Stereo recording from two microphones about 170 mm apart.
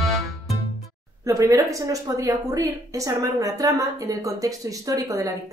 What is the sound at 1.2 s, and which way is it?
A woman's voice, 20° right (ahead or behind).